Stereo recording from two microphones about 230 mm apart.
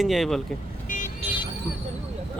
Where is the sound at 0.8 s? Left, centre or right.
Left.